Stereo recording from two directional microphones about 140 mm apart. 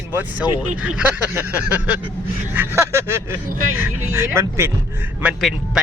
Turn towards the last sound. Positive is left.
turn(degrees=0)  # may be behind; listen again after turning